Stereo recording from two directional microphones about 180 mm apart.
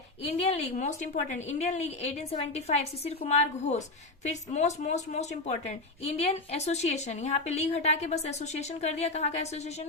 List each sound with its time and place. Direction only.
0.5 s a woman's voice: 40° left (ahead or behind)